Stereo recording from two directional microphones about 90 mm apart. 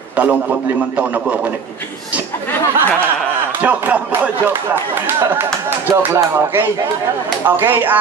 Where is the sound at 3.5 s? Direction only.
20° right (ahead or behind).